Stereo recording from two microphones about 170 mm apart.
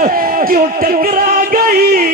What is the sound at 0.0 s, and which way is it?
Music, 55° right (ahead or behind).